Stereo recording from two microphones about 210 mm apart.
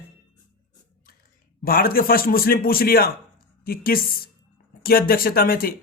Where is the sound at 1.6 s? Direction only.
45° left (ahead or behind).